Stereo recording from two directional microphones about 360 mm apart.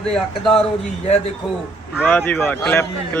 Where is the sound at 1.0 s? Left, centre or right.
Centre.